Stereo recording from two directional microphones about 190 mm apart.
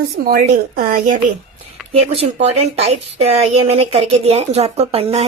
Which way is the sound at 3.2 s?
35° right (ahead or behind).